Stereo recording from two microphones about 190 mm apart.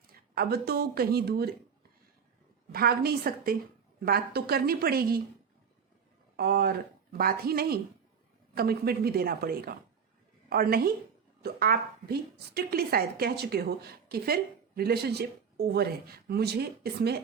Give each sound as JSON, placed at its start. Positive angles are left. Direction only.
{"t": 0.1, "sound": "speech", "side_deg": -55}
{"t": 2.7, "sound": "a woman's voice", "side_deg": -55}
{"t": 6.3, "sound": "a woman's voice", "side_deg": -55}